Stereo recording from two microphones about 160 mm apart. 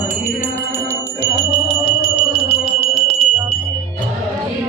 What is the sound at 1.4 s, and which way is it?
Music, 40° left (ahead or behind).